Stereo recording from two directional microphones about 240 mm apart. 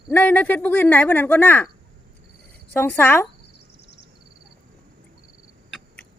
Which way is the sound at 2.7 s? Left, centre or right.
Centre.